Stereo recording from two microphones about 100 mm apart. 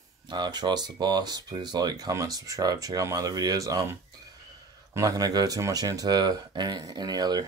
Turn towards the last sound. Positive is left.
turn(degrees=-45)  # may be behind; listen again after turning